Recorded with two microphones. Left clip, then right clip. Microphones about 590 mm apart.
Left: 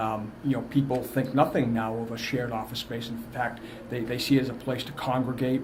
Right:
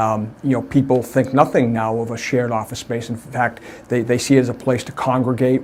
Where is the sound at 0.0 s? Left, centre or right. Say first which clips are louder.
Right 10 dB; right.